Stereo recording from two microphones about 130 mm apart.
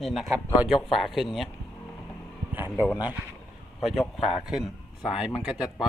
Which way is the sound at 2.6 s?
15° right (ahead or behind).